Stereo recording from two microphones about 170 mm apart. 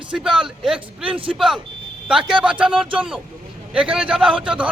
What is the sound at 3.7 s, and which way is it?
Speech, 5° right (ahead or behind).